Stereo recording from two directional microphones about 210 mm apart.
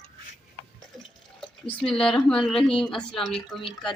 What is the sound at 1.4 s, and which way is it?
Speech, 5° left (ahead or behind).